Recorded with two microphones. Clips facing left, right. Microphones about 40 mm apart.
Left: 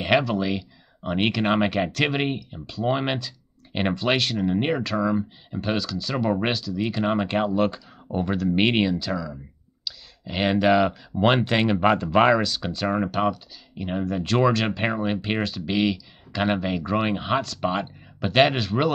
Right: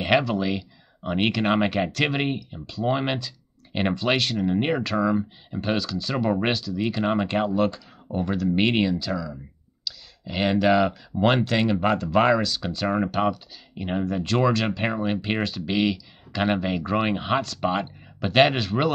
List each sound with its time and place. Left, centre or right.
0.0 s speech: centre
12.4 s speech: centre